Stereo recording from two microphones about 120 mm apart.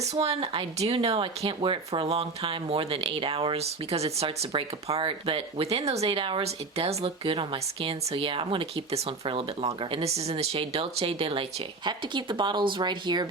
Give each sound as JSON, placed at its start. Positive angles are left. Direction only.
{"t": 0.0, "sound": "speech", "side_deg": -60}